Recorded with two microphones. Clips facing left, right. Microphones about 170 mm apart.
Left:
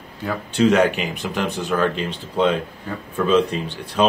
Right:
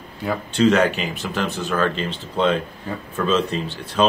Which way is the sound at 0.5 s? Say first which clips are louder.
Left 1 dB; 10° left (ahead or behind).